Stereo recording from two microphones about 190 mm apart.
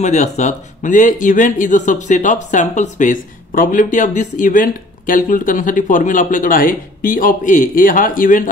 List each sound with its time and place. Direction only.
0.0 s speech: 35° left (ahead or behind)